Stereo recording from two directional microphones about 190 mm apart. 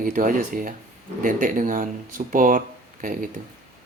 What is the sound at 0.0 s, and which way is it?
Speech, 45° right (ahead or behind).